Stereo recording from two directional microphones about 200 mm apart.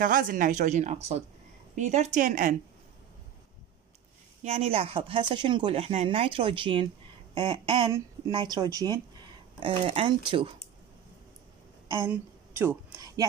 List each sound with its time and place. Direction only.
0.0 s speech: 40° right (ahead or behind)
4.4 s speech: 30° right (ahead or behind)
11.9 s a woman's voice: 15° right (ahead or behind)